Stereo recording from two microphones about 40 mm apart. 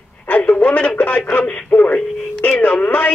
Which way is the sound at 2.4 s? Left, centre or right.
Left.